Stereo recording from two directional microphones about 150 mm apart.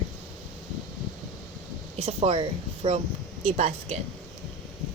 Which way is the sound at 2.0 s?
45° right (ahead or behind).